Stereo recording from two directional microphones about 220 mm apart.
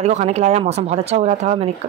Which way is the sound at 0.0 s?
30° right (ahead or behind).